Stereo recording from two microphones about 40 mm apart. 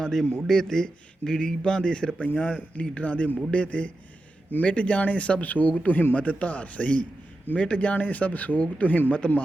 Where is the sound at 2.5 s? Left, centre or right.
Left.